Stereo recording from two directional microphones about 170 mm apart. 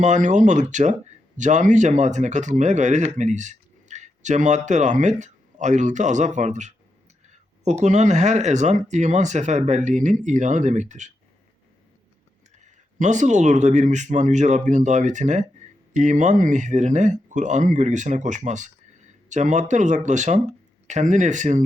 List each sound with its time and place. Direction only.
0.0 s speech: 45° right (ahead or behind)
12.6 s speech: 45° right (ahead or behind)